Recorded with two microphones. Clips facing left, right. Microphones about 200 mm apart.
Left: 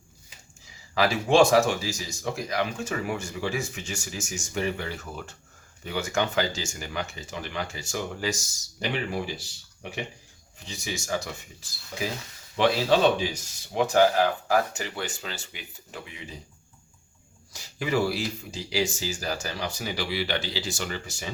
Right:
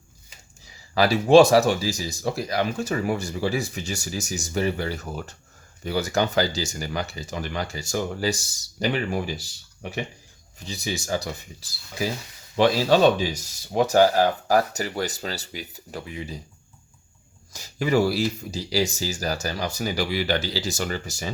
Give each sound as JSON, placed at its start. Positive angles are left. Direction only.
{"t": 0.9, "sound": "speech", "side_deg": -35}
{"t": 10.7, "sound": "speech", "side_deg": -35}
{"t": 17.5, "sound": "speech", "side_deg": -40}